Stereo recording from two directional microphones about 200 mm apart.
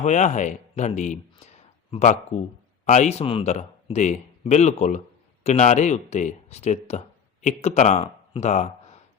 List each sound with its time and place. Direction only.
0.0 s speech: 35° left (ahead or behind)